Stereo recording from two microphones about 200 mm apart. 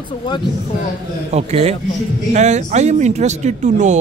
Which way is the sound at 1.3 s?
30° right (ahead or behind).